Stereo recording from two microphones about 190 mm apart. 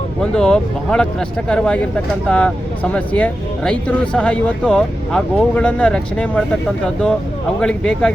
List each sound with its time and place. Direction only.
0.2 s speech: 5° left (ahead or behind)
7.6 s speech: 5° left (ahead or behind)